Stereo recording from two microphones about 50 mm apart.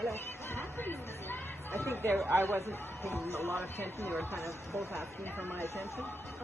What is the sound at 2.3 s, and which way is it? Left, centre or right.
Speech, right.